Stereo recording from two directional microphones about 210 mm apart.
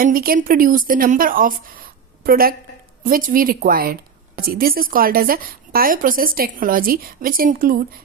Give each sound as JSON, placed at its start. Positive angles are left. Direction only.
{"t": 0.0, "sound": "a woman's voice", "side_deg": -40}